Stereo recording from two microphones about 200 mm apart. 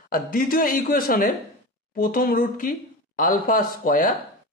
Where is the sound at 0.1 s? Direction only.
45° left (ahead or behind).